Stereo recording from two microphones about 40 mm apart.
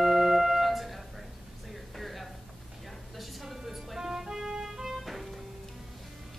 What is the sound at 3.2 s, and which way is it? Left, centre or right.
Music, centre.